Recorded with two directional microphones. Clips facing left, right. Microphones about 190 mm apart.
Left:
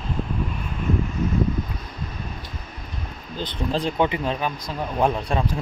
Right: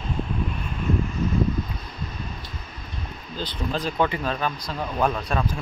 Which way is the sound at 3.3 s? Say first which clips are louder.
Left 3 dB; 25° left (ahead or behind).